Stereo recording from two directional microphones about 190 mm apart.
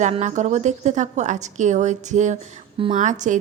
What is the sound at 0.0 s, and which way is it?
A woman's voice, 40° right (ahead or behind).